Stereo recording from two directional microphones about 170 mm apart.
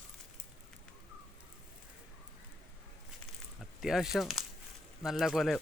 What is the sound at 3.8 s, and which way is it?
Speech, centre (ahead or behind).